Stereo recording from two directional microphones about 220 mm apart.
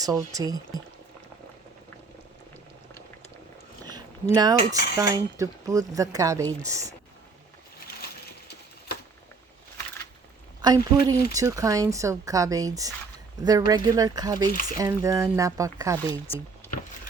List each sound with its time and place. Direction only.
0.0 s coin: 15° right (ahead or behind)
3.8 s coin: 20° right (ahead or behind)
8.0 s crushing: 45° left (ahead or behind)
10.6 s coin: 20° right (ahead or behind)